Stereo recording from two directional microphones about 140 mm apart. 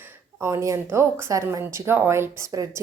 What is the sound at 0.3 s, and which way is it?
Speech, 20° right (ahead or behind).